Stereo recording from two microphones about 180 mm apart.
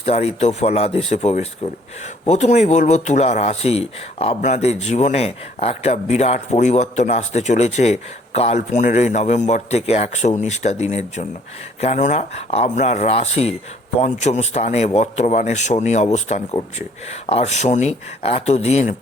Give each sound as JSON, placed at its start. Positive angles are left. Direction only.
{"t": 0.0, "sound": "a man's voice", "side_deg": 35}